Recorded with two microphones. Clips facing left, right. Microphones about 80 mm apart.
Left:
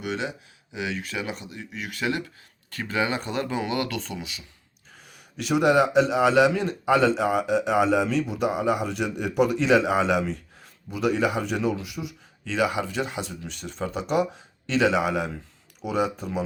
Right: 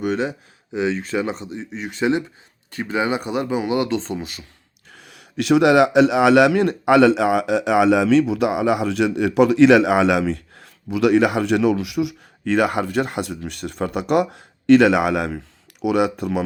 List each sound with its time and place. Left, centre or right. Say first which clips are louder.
0.0 s speech: right 8 dB; right
4.9 s a man's voice: right 5 dB; right